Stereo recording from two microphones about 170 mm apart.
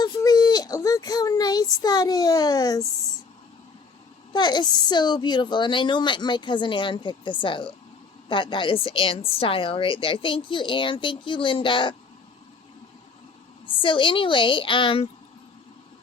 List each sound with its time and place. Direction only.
0.0 s a sound: 25° left (ahead or behind)
4.3 s a woman's voice: 25° left (ahead or behind)
13.7 s a woman's voice: 30° left (ahead or behind)